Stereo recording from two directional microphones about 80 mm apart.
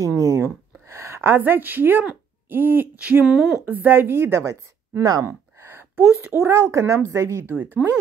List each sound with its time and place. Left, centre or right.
0.0 s a sound: right
2.5 s a woman's voice: right
3.3 s speech: centre
3.6 s a woman's voice: right
7.5 s a woman's voice: right